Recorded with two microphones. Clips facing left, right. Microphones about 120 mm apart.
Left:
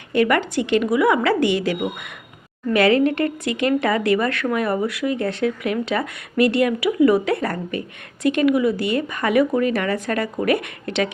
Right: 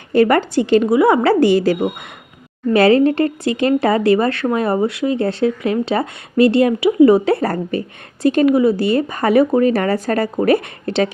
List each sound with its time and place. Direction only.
0.1 s a woman's voice: 35° right (ahead or behind)